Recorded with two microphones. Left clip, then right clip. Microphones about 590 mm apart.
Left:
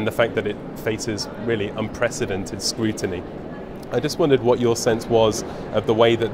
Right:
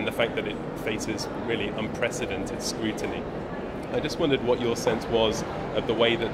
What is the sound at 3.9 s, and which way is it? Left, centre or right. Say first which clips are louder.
Speech: left 7 dB; left.